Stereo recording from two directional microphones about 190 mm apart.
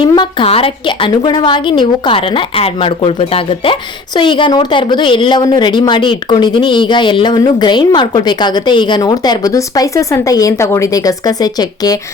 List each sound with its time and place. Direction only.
0.1 s a woman's voice: 25° left (ahead or behind)